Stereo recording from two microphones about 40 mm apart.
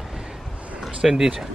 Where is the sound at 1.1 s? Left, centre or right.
Centre.